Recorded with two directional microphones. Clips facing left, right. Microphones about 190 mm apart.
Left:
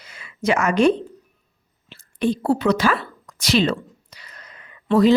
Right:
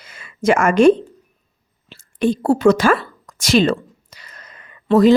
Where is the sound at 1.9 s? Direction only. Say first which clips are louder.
Right 3 dB; 45° right (ahead or behind).